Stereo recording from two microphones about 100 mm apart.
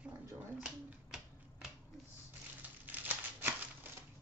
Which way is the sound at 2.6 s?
15° right (ahead or behind).